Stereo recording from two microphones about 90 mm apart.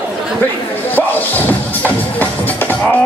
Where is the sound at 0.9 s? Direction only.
20° left (ahead or behind).